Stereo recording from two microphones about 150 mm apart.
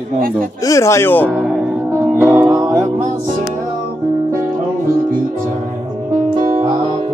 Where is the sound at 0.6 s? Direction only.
20° left (ahead or behind).